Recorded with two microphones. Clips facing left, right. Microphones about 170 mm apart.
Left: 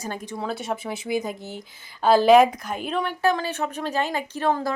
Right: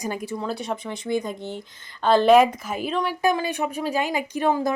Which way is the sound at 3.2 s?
15° right (ahead or behind).